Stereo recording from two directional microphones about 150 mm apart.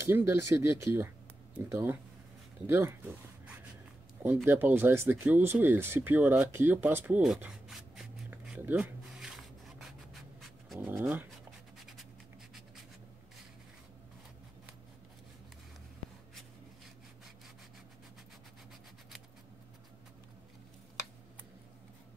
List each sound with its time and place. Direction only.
0.0 s speech: 15° right (ahead or behind)
8.3 s writing: 15° right (ahead or behind)
10.8 s speech: 15° right (ahead or behind)